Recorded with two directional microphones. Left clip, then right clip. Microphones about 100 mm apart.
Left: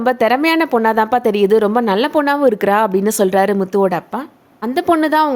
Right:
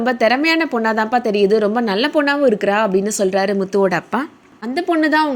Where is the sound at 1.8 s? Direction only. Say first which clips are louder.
Left 2 dB; 25° left (ahead or behind).